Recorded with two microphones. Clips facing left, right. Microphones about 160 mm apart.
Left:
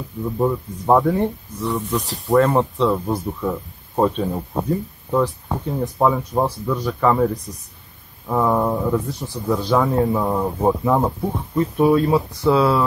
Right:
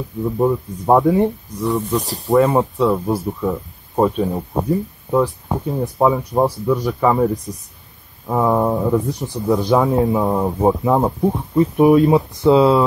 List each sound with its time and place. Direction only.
0.4 s speech: 15° right (ahead or behind)
1.9 s speech: 35° right (ahead or behind)
2.2 s speech: 15° right (ahead or behind)
8.3 s speech: 10° right (ahead or behind)